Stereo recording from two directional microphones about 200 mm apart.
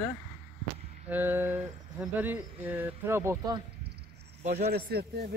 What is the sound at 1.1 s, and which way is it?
Speech, 10° right (ahead or behind).